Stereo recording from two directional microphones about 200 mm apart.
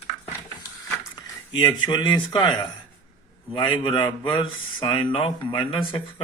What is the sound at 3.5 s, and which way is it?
Speech, 25° left (ahead or behind).